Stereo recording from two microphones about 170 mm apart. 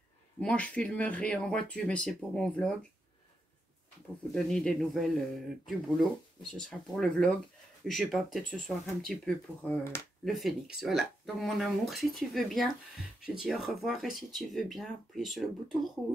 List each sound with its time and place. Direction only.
0.4 s speech: 5° left (ahead or behind)
4.3 s speech: 5° left (ahead or behind)
10.2 s speech: centre (ahead or behind)